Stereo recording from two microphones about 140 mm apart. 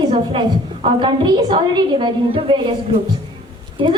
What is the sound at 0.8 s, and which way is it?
A woman's voice, 35° right (ahead or behind).